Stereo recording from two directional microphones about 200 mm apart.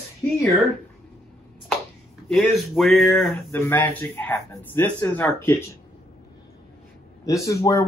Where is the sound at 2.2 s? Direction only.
Centre (ahead or behind).